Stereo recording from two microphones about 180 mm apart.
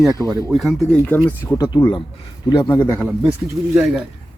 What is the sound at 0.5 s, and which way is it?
Speech, centre (ahead or behind).